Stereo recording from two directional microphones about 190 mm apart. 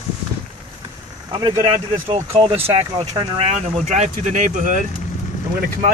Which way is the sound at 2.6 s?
20° right (ahead or behind).